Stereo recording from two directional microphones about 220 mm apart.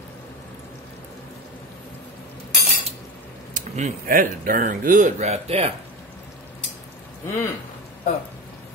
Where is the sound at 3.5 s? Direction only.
35° right (ahead or behind).